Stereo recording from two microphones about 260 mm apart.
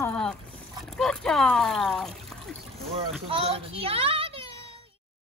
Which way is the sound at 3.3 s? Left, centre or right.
Right.